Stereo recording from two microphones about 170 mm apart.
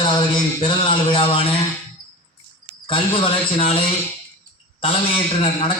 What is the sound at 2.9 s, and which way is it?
A man's voice, 30° left (ahead or behind).